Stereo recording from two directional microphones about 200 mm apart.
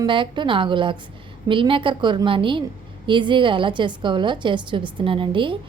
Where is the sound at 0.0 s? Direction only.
25° right (ahead or behind).